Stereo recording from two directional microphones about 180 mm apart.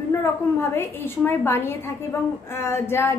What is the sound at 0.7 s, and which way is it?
A woman's voice, 10° left (ahead or behind).